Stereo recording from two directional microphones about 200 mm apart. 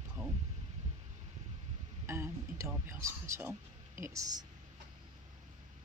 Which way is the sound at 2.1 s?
15° right (ahead or behind).